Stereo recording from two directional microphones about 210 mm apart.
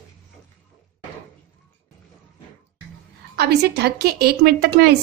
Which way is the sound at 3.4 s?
50° right (ahead or behind).